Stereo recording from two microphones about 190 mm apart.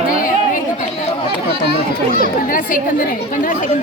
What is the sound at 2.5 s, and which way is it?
Speech, 45° left (ahead or behind).